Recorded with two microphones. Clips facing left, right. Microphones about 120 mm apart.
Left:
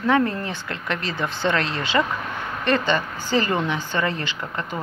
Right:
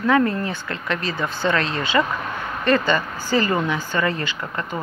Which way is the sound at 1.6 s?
15° right (ahead or behind).